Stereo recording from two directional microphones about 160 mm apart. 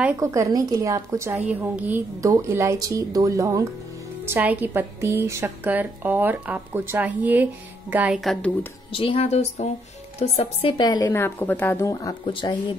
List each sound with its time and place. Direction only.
0.2 s a woman's voice: 20° right (ahead or behind)
8.2 s a woman's voice: centre (ahead or behind)
8.9 s a woman's voice: 35° left (ahead or behind); by 12.2 s 20° left (ahead or behind)
12.3 s a woman's voice: 30° left (ahead or behind)